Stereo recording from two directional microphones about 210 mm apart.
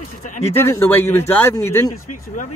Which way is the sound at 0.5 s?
10° left (ahead or behind).